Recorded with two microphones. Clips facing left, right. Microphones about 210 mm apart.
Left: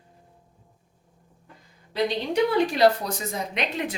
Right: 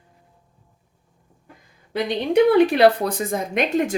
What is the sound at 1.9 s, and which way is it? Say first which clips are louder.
Speech: right 4 dB; 55° right (ahead or behind).